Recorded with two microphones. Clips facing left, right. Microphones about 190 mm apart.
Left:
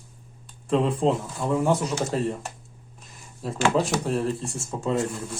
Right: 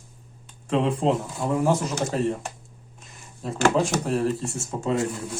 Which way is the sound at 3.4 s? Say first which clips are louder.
Right 1 dB; 5° left (ahead or behind).